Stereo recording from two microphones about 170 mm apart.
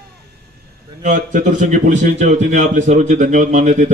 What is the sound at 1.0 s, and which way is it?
A man's voice, 50° right (ahead or behind).